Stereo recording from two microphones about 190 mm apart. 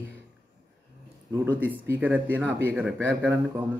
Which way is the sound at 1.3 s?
10° right (ahead or behind).